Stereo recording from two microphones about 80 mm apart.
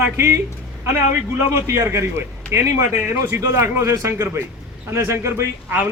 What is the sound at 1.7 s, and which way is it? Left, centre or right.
A man's voice, right.